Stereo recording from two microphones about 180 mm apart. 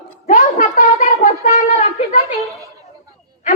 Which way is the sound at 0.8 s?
40° left (ahead or behind).